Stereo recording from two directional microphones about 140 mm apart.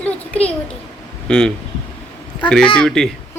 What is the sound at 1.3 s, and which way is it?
Speech, 5° left (ahead or behind).